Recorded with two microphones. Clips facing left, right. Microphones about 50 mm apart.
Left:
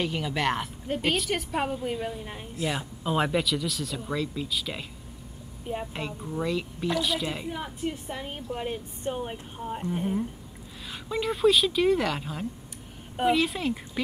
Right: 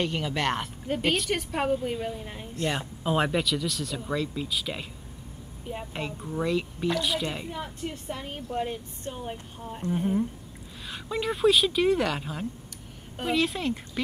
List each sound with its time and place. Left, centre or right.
0.0 s a woman's voice: centre
5.9 s a woman's voice: centre
9.1 s speech: left
9.8 s a woman's voice: centre